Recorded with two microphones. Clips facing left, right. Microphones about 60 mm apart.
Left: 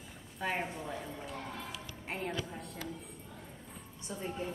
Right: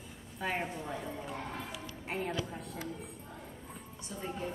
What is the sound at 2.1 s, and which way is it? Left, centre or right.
Speech, centre.